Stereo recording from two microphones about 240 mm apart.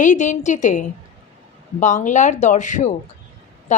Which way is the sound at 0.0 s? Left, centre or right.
Left.